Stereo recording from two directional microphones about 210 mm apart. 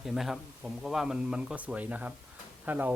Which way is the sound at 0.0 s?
Centre (ahead or behind).